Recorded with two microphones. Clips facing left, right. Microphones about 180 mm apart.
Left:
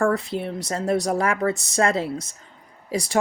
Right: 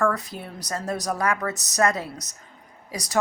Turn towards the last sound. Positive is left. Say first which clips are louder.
# left 8 dB
turn(degrees=25)  # may be behind; listen again after turning